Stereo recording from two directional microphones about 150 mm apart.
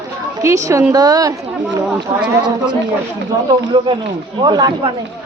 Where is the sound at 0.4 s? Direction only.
20° right (ahead or behind).